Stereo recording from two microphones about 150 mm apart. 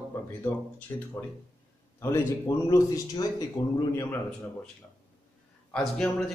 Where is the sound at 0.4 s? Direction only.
10° left (ahead or behind).